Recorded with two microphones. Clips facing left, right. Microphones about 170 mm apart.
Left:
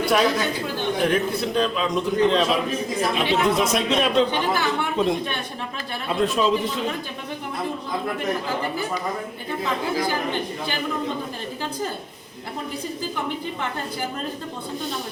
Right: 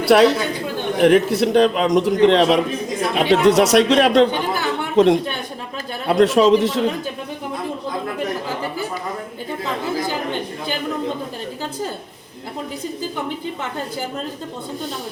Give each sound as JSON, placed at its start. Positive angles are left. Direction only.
{"t": 0.0, "sound": "a man's voice", "side_deg": -75}